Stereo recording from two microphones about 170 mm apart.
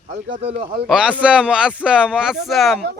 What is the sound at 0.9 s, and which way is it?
Speech, 5° right (ahead or behind).